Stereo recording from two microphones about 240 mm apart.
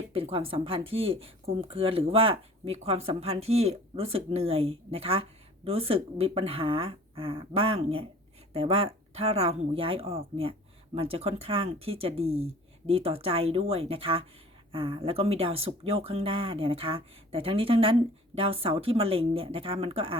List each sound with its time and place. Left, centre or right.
0.1 s speech: right